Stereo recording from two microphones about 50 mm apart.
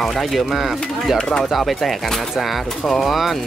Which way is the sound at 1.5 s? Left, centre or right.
Centre.